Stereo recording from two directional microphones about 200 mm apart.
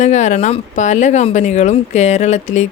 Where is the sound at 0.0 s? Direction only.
35° left (ahead or behind).